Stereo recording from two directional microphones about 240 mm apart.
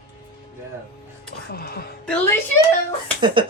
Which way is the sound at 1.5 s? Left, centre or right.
Left.